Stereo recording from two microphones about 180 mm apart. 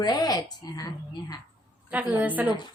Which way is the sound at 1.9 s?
10° right (ahead or behind).